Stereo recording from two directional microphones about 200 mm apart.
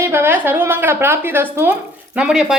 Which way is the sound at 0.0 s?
10° right (ahead or behind).